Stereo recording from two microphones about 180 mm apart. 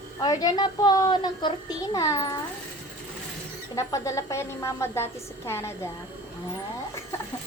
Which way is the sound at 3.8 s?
15° left (ahead or behind).